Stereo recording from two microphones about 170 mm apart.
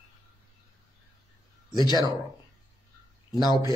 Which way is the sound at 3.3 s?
25° left (ahead or behind).